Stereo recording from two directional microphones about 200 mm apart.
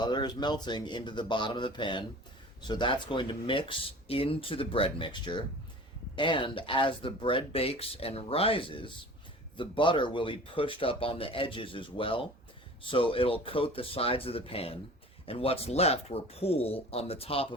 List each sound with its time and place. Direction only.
0.0 s speech: 20° left (ahead or behind)